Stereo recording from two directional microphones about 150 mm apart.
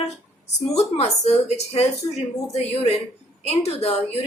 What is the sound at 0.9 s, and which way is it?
Speech, 45° left (ahead or behind).